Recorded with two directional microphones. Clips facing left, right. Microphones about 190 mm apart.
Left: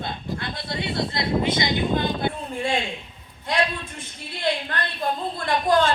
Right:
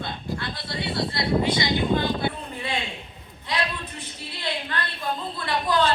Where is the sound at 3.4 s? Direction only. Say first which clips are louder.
Left 4 dB; 50° left (ahead or behind).